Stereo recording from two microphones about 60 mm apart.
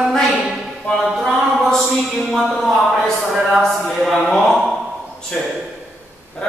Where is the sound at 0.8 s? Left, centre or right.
Centre.